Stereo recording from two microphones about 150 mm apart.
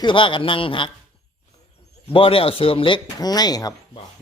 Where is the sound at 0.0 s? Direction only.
35° left (ahead or behind).